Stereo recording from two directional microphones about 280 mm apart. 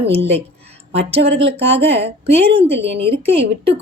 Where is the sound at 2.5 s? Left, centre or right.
Right.